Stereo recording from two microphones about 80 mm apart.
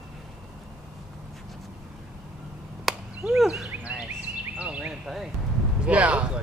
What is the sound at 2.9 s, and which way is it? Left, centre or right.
Chop, centre.